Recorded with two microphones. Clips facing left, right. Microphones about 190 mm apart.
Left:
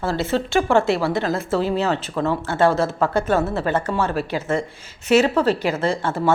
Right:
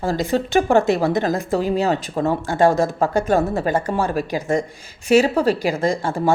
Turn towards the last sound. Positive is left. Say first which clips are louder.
# right 1 dB
turn(degrees=-15)  # may be behind; listen again after turning